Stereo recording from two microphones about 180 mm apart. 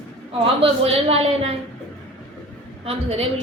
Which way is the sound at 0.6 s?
30° right (ahead or behind).